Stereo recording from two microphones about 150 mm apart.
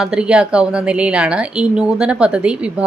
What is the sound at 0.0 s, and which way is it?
A woman's voice, 5° right (ahead or behind).